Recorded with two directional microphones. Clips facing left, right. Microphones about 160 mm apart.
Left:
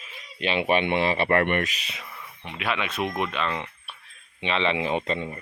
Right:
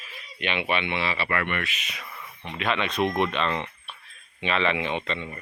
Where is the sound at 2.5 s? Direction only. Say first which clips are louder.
Right 2 dB; 10° left (ahead or behind).